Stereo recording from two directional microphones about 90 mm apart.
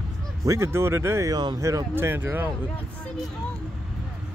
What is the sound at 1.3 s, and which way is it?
Speech, 50° right (ahead or behind).